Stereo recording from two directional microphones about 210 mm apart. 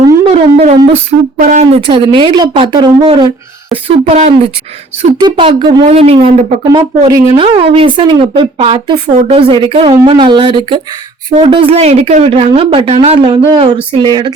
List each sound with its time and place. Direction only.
0.0 s music: 25° right (ahead or behind)
1.4 s speech: 35° right (ahead or behind); by 14.3 s 20° right (ahead or behind)